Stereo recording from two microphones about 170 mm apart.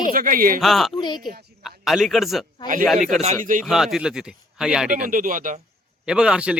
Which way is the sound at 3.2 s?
45° right (ahead or behind).